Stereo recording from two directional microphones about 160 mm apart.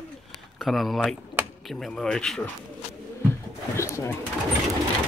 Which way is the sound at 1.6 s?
Centre (ahead or behind).